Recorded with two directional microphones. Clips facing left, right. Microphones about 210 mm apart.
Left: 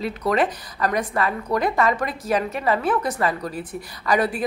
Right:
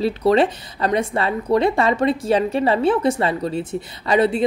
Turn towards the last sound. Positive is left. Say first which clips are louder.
# right 4 dB
turn(degrees=-25)  # may be behind; listen again after turning